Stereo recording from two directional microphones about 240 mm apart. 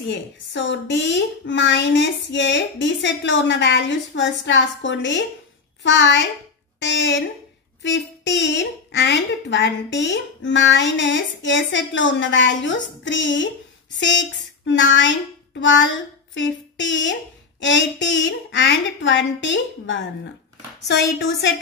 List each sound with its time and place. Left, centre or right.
0.1 s a woman's voice: left